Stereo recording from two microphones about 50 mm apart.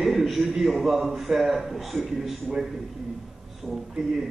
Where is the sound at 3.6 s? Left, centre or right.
Centre.